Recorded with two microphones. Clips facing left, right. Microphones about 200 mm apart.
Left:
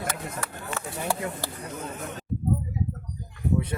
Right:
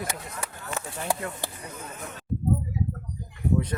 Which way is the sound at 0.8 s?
20° right (ahead or behind).